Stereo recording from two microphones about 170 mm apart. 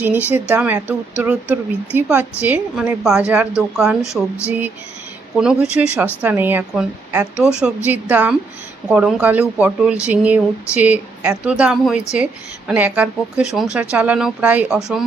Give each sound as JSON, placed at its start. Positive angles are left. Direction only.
{"t": 0.3, "sound": "a woman's voice", "side_deg": -10}
{"t": 4.0, "sound": "speech", "side_deg": 15}
{"t": 5.4, "sound": "a woman's voice", "side_deg": -5}